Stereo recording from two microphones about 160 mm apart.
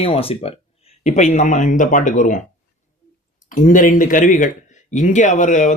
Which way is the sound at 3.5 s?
55° left (ahead or behind).